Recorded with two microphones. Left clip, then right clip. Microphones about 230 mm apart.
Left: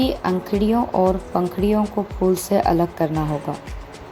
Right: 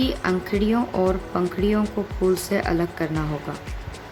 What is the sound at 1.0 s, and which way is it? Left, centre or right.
Speech, centre.